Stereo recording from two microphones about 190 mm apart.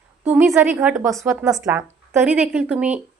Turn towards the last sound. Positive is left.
turn(degrees=-5)  # may be behind; listen again after turning